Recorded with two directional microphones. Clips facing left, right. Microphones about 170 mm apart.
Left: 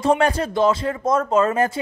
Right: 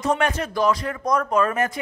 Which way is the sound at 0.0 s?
30° left (ahead or behind).